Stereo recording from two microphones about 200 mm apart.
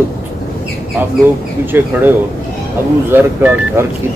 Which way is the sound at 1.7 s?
10° right (ahead or behind).